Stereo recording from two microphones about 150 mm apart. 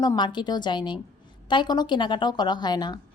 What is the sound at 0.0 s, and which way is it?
Speech, 30° left (ahead or behind).